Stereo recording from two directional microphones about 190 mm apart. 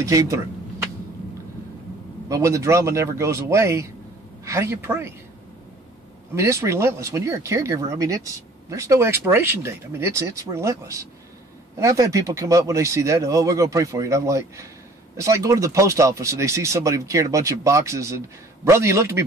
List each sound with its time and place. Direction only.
0.0 s speech: 15° right (ahead or behind)
2.2 s speech: 15° right (ahead or behind)
6.3 s speech: 15° right (ahead or behind)